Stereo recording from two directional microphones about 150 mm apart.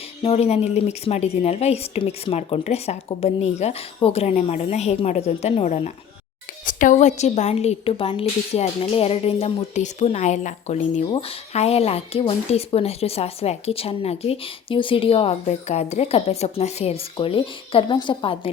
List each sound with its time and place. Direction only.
0.2 s a woman's voice: 40° left (ahead or behind)
6.7 s a woman's voice: 60° left (ahead or behind); by 18.5 s 35° left (ahead or behind)